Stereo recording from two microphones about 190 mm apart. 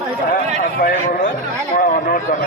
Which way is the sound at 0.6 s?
45° left (ahead or behind).